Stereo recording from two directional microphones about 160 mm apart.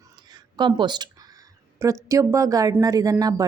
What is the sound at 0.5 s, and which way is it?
A woman's voice, 30° right (ahead or behind).